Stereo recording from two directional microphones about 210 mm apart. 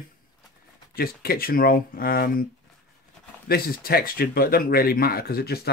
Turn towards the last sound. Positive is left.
turn(degrees=50)  # may be behind; listen again after turning